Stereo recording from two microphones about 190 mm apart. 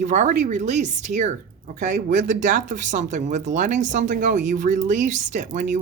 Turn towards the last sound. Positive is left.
turn(degrees=-40)  # may be behind; listen again after turning